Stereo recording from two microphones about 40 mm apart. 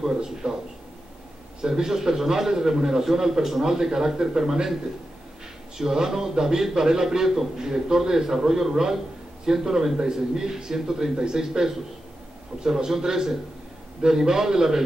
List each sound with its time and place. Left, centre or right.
0.0 s a man's voice: centre
1.6 s a man's voice: centre
5.8 s a man's voice: centre